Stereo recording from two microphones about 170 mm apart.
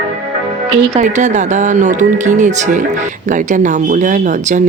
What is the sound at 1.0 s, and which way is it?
Speech, 45° right (ahead or behind).